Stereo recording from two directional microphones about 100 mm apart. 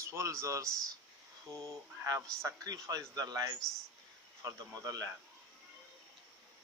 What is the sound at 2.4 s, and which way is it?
A man's voice, 35° right (ahead or behind).